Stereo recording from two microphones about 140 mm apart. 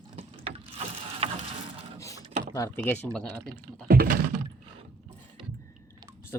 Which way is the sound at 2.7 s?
10° left (ahead or behind).